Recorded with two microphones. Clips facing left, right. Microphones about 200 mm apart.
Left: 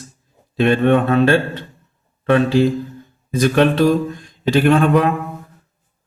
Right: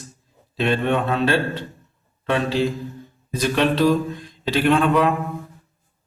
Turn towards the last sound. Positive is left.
turn(degrees=50)  # may be behind; listen again after turning